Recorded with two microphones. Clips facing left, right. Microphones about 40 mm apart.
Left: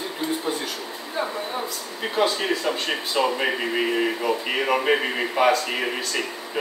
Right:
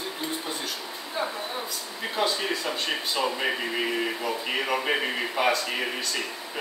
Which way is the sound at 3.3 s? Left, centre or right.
Centre.